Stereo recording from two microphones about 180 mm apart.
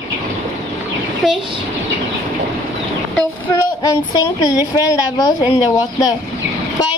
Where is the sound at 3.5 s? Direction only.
20° left (ahead or behind).